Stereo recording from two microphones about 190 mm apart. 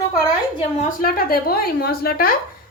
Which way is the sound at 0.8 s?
50° left (ahead or behind).